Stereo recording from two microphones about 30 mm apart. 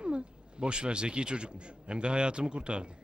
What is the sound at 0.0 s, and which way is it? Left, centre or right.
A woman's voice, right.